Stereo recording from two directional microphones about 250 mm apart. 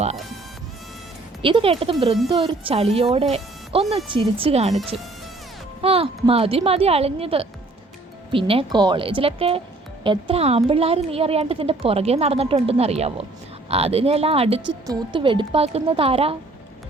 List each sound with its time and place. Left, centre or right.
1.4 s speech: right